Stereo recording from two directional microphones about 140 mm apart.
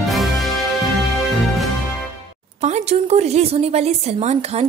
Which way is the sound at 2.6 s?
50° right (ahead or behind).